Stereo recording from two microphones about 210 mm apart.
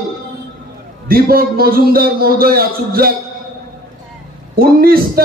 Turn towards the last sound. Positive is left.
turn(degrees=-45)  # may be behind; listen again after turning